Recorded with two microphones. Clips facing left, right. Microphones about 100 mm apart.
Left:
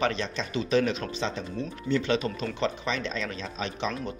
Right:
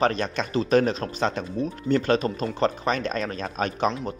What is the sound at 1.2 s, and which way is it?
Speech, 55° right (ahead or behind).